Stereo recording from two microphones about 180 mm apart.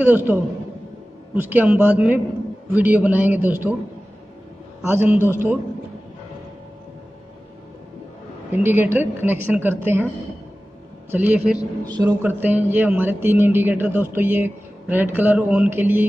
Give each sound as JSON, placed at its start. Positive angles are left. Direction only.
{"t": 0.0, "sound": "a man's voice", "side_deg": -10}
{"t": 4.8, "sound": "a man's voice", "side_deg": -10}
{"t": 8.5, "sound": "a man's voice", "side_deg": -10}
{"t": 11.1, "sound": "a man's voice", "side_deg": -10}
{"t": 11.8, "sound": "a man's voice", "side_deg": -20}
{"t": 12.2, "sound": "a man's voice", "side_deg": -10}